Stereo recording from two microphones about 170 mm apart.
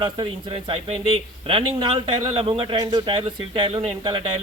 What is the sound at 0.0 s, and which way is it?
Speech, 30° right (ahead or behind).